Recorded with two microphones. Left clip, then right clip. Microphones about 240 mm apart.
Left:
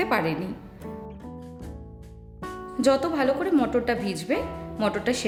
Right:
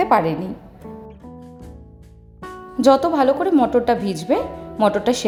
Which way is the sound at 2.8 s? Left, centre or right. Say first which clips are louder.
Right 8 dB; centre.